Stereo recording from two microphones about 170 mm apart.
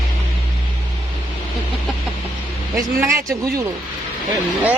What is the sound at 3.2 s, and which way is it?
Speech, 20° right (ahead or behind).